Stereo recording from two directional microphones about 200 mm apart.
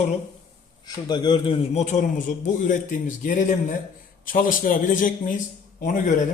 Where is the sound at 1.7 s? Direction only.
35° left (ahead or behind).